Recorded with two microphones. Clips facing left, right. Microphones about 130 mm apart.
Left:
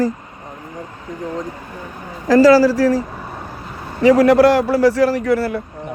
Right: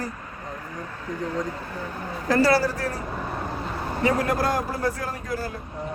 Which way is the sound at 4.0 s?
85° left.